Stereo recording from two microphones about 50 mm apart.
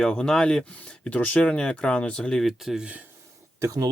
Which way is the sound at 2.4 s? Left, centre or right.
Centre.